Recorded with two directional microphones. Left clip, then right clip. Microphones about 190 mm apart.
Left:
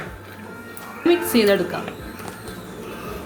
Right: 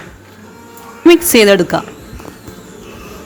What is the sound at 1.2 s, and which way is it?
Speech, 55° right (ahead or behind).